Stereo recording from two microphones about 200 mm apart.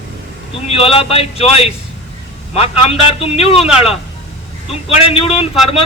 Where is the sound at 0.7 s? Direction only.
30° left (ahead or behind).